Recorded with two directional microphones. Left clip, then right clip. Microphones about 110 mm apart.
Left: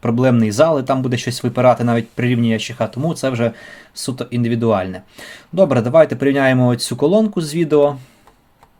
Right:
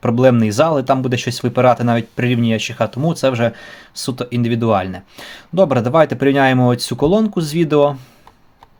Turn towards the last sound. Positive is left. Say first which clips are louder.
# even
turn(degrees=-45)  # may be behind; listen again after turning